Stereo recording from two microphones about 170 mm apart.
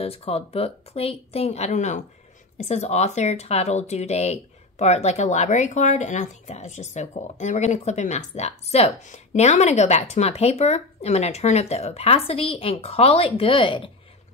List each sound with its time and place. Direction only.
0.0 s speech: 35° left (ahead or behind)